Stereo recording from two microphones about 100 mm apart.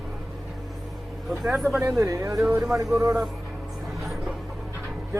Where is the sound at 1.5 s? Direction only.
Centre (ahead or behind).